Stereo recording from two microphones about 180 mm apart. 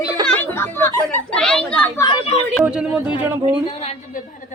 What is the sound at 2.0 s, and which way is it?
Speech, 25° left (ahead or behind).